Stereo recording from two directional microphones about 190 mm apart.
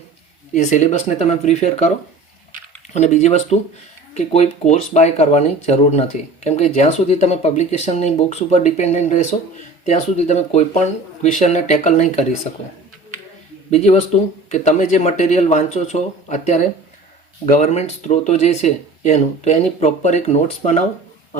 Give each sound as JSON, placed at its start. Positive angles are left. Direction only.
{"t": 0.5, "sound": "speech", "side_deg": 40}
{"t": 2.9, "sound": "speech", "side_deg": 35}
{"t": 13.7, "sound": "speech", "side_deg": 35}